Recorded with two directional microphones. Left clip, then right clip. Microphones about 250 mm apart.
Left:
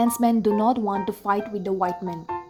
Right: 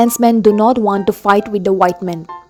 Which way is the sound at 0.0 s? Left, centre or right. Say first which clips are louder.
Right 10 dB; right.